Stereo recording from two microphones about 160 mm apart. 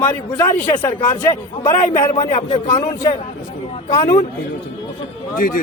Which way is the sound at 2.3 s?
40° left (ahead or behind).